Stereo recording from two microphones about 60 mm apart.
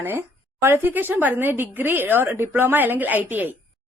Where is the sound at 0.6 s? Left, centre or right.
Right.